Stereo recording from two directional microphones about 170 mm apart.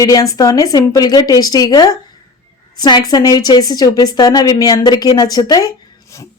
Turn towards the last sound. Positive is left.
turn(degrees=20)  # may be behind; listen again after turning